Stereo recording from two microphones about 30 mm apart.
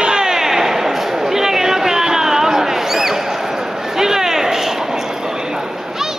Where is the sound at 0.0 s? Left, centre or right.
Right.